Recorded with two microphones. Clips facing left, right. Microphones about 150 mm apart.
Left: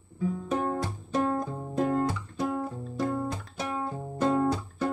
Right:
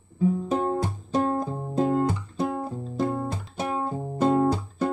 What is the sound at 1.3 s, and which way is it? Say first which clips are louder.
Music: right 3 dB; 30° right (ahead or behind).